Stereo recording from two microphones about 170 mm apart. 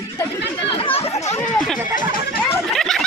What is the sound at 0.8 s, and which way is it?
Chatter, 35° left (ahead or behind).